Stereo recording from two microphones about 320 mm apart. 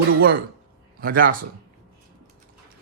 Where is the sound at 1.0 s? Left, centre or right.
Right.